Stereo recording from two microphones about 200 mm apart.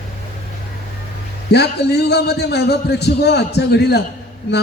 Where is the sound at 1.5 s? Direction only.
55° left (ahead or behind).